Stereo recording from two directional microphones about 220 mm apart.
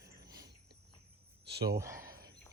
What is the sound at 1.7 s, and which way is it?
Speech, 15° right (ahead or behind).